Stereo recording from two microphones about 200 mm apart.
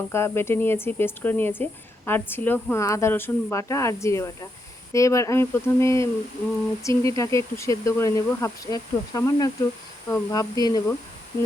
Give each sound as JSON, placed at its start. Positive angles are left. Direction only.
{"t": 0.1, "sound": "speech", "side_deg": 10}